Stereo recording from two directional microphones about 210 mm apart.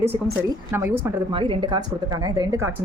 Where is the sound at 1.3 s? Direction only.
25° right (ahead or behind).